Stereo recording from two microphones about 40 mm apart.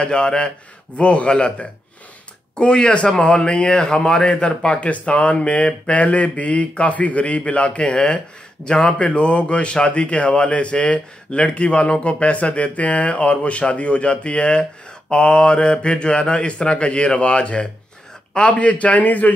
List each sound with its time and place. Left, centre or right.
0.0 s a man's voice: left
4.7 s a man's voice: left